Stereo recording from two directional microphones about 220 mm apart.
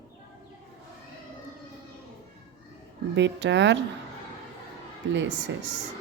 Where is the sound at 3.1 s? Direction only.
55° right (ahead or behind).